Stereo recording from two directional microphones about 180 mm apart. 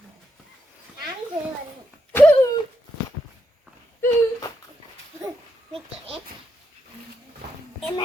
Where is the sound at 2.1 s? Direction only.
10° left (ahead or behind).